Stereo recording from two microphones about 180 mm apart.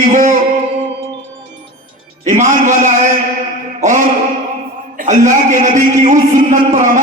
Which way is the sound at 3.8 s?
40° right (ahead or behind).